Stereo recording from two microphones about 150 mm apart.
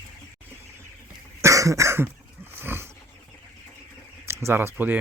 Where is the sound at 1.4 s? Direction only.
20° right (ahead or behind).